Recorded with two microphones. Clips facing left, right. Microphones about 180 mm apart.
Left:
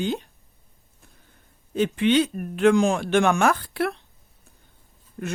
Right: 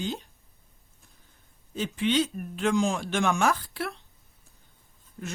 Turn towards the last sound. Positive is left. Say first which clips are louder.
# left 6 dB
turn(degrees=60)  # may be behind; listen again after turning